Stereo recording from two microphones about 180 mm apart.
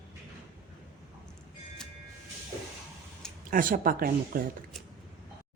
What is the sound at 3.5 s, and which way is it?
Speech, 50° right (ahead or behind).